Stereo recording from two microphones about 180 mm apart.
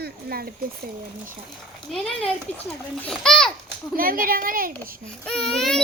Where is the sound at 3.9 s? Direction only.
50° right (ahead or behind).